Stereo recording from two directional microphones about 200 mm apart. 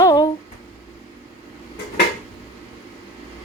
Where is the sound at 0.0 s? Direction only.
20° left (ahead or behind).